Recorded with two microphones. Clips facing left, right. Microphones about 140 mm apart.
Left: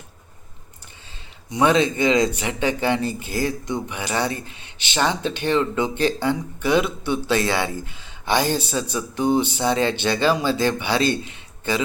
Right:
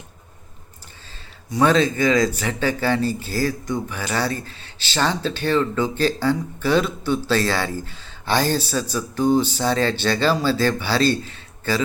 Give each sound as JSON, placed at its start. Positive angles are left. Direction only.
{"t": 1.5, "sound": "speech", "side_deg": 20}